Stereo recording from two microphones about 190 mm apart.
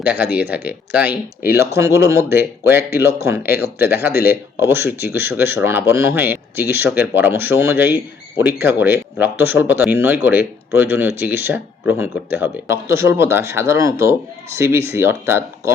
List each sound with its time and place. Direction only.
0.0 s speech: 10° right (ahead or behind)
3.4 s speech: 55° left (ahead or behind)
4.6 s speech: 10° right (ahead or behind)